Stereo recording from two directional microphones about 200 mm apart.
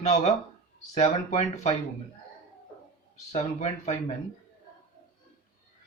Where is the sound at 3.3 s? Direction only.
35° left (ahead or behind).